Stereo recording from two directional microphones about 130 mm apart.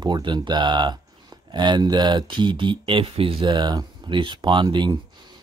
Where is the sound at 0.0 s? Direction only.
35° right (ahead or behind).